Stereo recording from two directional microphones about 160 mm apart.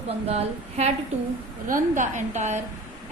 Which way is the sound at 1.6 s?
55° right (ahead or behind).